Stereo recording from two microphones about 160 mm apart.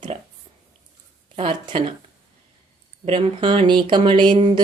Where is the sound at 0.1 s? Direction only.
35° right (ahead or behind).